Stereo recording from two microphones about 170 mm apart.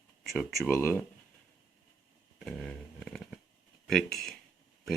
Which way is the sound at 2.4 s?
5° left (ahead or behind).